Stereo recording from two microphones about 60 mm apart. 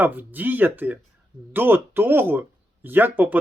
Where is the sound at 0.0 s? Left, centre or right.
Right.